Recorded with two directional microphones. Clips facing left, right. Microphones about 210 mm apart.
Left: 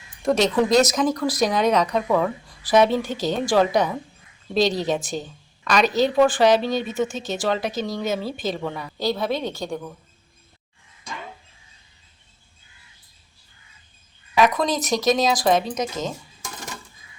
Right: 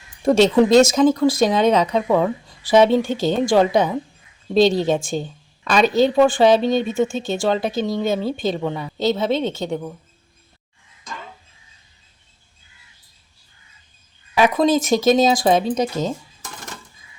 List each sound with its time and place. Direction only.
0.3 s speech: 30° right (ahead or behind)
8.1 s speech: 5° left (ahead or behind)
8.5 s speech: 20° right (ahead or behind)
14.3 s speech: 25° right (ahead or behind)